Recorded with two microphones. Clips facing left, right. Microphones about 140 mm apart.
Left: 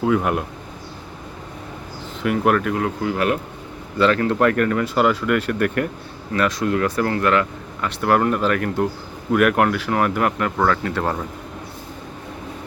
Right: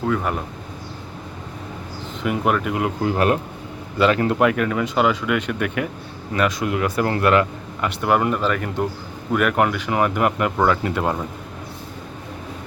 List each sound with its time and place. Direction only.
0.0 s speech: 5° left (ahead or behind)
2.2 s speech: centre (ahead or behind)
3.0 s a man's voice: 30° right (ahead or behind)
3.9 s speech: 15° right (ahead or behind)
7.0 s speech: 20° right (ahead or behind)
7.9 s speech: 5° right (ahead or behind)